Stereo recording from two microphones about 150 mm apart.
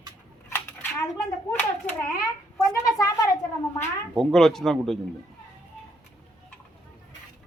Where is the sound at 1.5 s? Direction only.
10° left (ahead or behind).